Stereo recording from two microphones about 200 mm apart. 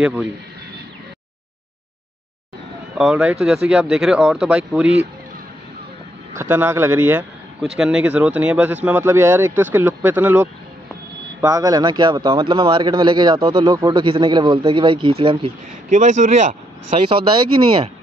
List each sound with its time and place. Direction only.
0.0 s speech: 5° right (ahead or behind)
3.0 s speech: 5° right (ahead or behind)
6.5 s a man's voice: 10° right (ahead or behind)
15.9 s speech: 35° right (ahead or behind)